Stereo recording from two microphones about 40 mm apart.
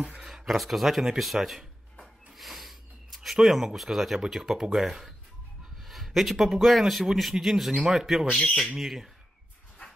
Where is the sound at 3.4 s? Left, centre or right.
Centre.